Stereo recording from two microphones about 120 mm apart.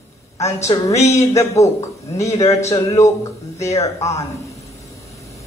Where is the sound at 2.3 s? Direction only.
60° left (ahead or behind).